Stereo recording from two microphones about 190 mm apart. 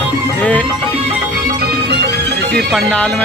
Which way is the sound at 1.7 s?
60° right (ahead or behind).